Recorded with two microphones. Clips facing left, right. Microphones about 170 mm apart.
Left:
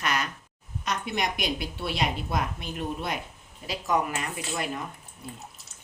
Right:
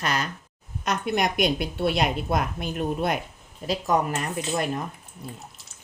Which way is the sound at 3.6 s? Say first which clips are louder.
Right 4 dB; 40° right (ahead or behind).